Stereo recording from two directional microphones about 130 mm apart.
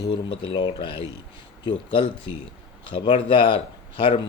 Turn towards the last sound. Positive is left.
turn(degrees=40)  # may be behind; listen again after turning